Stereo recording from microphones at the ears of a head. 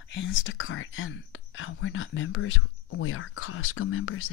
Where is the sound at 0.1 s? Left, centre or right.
Left.